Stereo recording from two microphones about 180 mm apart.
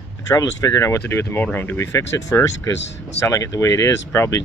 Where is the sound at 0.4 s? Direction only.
20° left (ahead or behind).